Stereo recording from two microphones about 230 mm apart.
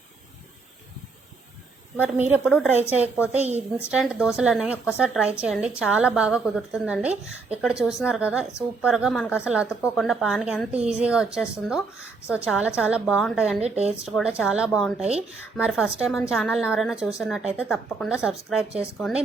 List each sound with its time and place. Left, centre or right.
2.0 s a woman's voice: centre
2.4 s a woman's voice: centre
2.9 s a woman's voice: centre
13.6 s a woman's voice: right
14.0 s a woman's voice: centre